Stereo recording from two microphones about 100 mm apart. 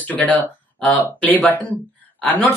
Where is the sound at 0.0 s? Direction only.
15° left (ahead or behind).